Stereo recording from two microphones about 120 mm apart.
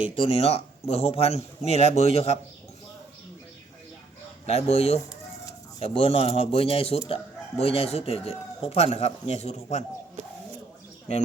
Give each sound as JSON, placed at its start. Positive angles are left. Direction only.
{"t": 0.0, "sound": "speech", "side_deg": 55}
{"t": 4.4, "sound": "speech", "side_deg": 60}
{"t": 5.8, "sound": "a man's voice", "side_deg": 50}